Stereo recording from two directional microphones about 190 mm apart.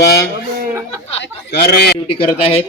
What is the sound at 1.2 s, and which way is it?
Speech, 55° left (ahead or behind).